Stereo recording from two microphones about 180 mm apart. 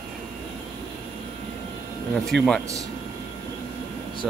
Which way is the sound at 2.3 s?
70° right (ahead or behind).